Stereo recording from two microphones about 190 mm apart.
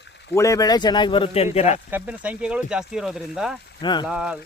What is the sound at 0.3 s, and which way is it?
Speech, 15° left (ahead or behind).